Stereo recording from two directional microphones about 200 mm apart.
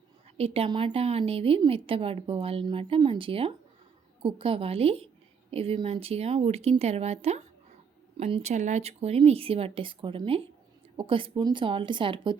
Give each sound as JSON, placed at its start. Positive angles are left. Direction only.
{"t": 0.3, "sound": "a woman's voice", "side_deg": -30}